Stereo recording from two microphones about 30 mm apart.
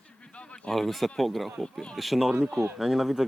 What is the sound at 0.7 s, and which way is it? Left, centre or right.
Speech, centre.